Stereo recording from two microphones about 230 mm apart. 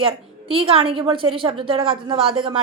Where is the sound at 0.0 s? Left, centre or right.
Right.